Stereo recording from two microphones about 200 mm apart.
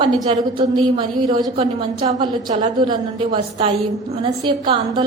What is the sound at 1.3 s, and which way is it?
A woman's voice, 30° right (ahead or behind).